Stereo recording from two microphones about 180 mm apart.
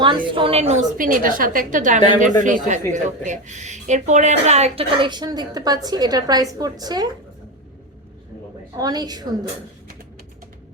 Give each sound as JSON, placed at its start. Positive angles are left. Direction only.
{"t": 0.0, "sound": "a woman's voice", "side_deg": -25}
{"t": 8.7, "sound": "speech", "side_deg": -20}